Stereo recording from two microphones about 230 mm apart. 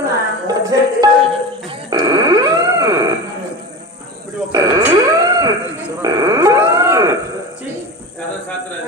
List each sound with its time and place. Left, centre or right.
0.0 s music: centre
1.7 s a sound: centre
4.5 s cattle: centre